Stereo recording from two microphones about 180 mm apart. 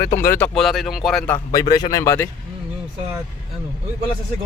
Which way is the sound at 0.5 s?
Centre (ahead or behind).